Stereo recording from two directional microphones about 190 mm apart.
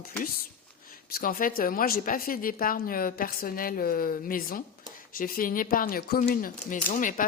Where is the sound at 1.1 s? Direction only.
50° left (ahead or behind).